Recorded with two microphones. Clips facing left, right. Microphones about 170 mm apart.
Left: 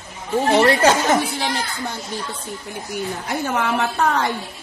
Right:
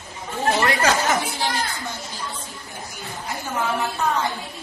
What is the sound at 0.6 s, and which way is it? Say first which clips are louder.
Chatter: left 5 dB; 35° left (ahead or behind).